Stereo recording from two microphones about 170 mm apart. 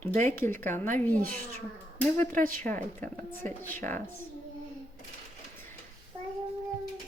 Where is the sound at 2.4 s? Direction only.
50° right (ahead or behind).